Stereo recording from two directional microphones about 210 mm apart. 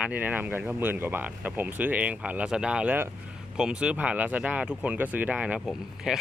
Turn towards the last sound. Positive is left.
turn(degrees=0)  # may be behind; listen again after turning